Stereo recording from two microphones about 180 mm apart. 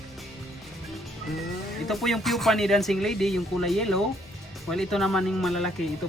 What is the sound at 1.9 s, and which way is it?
Speech, centre (ahead or behind).